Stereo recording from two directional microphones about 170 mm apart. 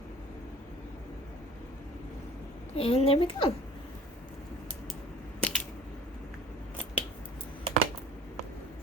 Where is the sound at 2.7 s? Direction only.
35° left (ahead or behind).